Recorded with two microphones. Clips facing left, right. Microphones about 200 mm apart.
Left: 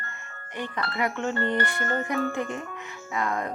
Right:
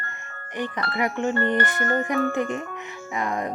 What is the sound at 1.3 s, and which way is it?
Speech, 55° right (ahead or behind).